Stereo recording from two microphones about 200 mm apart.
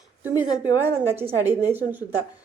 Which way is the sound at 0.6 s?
10° right (ahead or behind).